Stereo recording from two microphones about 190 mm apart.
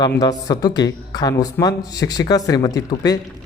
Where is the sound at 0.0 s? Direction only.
20° left (ahead or behind).